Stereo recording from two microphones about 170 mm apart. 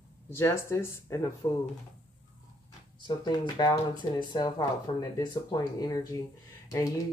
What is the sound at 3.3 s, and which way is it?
Speech, 25° left (ahead or behind).